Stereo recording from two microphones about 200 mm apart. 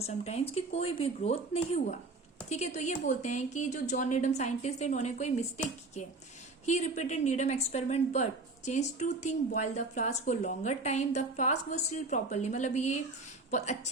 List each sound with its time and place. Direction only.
0.0 s a woman's voice: 30° left (ahead or behind)
6.7 s a woman's voice: 35° left (ahead or behind)